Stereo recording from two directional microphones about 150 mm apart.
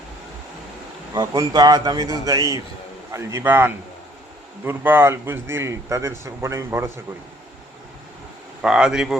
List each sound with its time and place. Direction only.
1.1 s a man's voice: 25° right (ahead or behind)
8.6 s speech: 5° right (ahead or behind)